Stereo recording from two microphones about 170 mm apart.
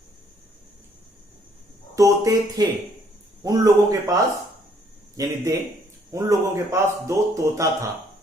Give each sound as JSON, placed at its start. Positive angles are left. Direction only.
{"t": 2.0, "sound": "a man's voice", "side_deg": -20}